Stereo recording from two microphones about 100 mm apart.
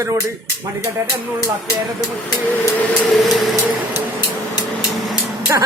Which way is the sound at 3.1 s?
Centre (ahead or behind).